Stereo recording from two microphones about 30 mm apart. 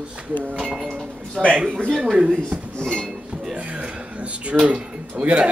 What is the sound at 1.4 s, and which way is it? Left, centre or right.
Speech, right.